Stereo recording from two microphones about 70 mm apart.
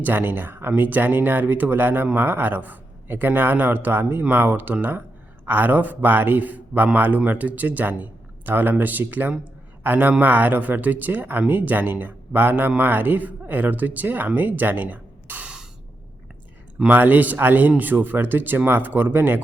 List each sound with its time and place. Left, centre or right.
0.0 s speech: right
16.9 s speech: right